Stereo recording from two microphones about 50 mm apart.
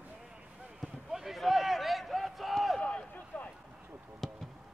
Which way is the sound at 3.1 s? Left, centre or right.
Left.